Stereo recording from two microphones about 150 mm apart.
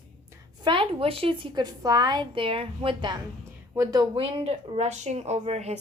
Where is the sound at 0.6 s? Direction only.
35° right (ahead or behind).